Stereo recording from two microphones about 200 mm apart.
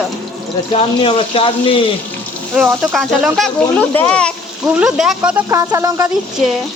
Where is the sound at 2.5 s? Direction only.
Centre (ahead or behind).